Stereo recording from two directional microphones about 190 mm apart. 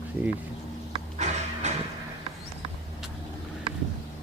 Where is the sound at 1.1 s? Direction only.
35° right (ahead or behind).